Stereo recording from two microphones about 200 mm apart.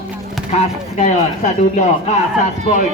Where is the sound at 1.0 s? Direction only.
40° left (ahead or behind).